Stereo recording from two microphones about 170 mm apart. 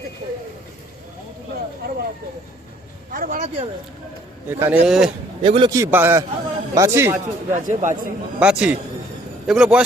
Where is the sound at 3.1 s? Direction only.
50° right (ahead or behind).